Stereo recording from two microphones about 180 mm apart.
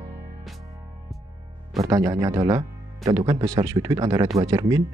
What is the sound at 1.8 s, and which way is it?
Speech, 20° right (ahead or behind).